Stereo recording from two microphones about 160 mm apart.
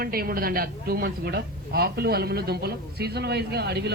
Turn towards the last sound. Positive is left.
turn(degrees=-90)